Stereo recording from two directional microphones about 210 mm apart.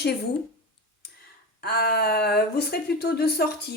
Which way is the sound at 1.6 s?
50° left (ahead or behind).